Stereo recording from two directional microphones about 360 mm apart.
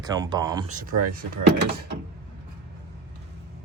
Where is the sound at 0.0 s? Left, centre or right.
Centre.